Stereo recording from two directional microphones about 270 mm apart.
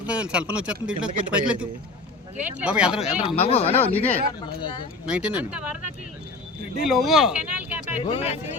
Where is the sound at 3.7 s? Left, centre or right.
Centre.